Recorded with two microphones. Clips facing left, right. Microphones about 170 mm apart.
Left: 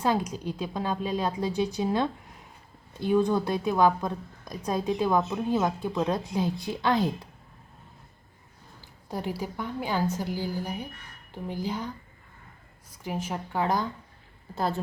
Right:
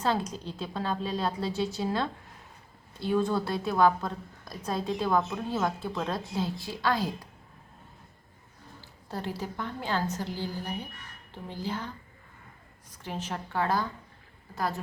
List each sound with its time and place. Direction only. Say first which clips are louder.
0.0 s a woman's voice: left 3 dB; 15° left (ahead or behind)
9.0 s a woman's voice: left 3 dB; 15° left (ahead or behind)
13.0 s a woman's voice: left 3 dB; 10° left (ahead or behind)
14.5 s a woman's voice: left 3 dB; 30° left (ahead or behind)